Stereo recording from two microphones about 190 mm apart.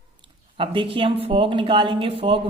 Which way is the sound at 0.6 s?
25° right (ahead or behind).